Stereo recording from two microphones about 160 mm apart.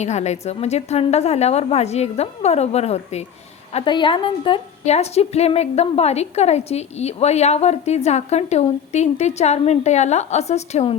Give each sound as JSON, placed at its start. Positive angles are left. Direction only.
{"t": 0.0, "sound": "a woman's voice", "side_deg": 45}